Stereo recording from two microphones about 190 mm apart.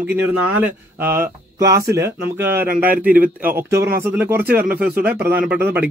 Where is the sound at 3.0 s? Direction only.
45° right (ahead or behind).